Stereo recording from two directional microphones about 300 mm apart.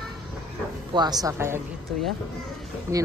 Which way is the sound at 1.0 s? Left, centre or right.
Centre.